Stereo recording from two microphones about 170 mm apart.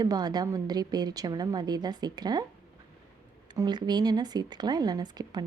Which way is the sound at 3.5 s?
25° right (ahead or behind).